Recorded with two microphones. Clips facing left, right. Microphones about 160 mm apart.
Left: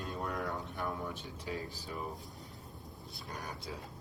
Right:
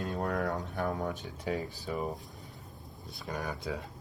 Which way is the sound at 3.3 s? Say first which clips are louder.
Right 8 dB; 90° right.